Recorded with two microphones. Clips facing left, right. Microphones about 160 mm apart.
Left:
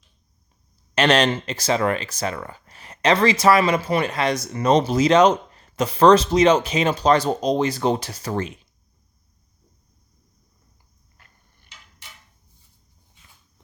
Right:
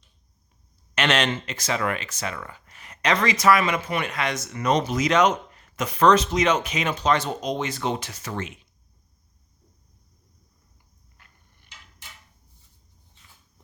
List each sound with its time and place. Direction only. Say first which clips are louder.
0.9 s speech: left 5 dB; 35° left (ahead or behind)